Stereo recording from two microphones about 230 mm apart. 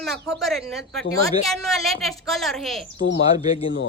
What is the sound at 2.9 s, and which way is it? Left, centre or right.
Speech, left.